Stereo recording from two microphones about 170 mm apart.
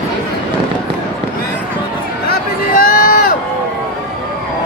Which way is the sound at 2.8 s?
60° left (ahead or behind).